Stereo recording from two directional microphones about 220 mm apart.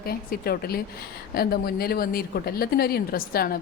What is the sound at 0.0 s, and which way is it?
A man's voice, 45° left (ahead or behind).